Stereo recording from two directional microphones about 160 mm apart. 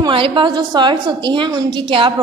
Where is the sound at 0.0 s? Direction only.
30° right (ahead or behind).